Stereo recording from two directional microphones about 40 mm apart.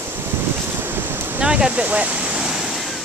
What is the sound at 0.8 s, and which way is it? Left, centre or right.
Boat, right.